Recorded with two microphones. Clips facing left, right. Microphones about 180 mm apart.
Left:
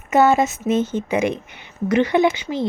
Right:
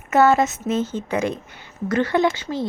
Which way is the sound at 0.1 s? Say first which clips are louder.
Left 1 dB; 15° left (ahead or behind).